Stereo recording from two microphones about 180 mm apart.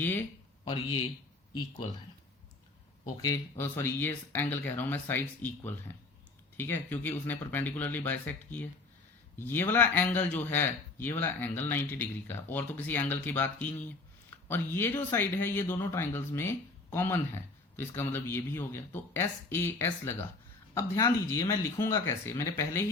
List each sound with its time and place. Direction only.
0.6 s a man's voice: 25° left (ahead or behind)
3.2 s speech: 15° left (ahead or behind)